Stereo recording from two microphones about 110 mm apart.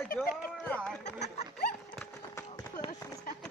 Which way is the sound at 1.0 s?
90° left.